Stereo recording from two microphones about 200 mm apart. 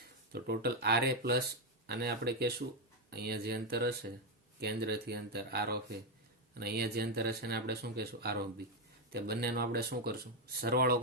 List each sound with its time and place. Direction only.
0.3 s speech: 55° right (ahead or behind)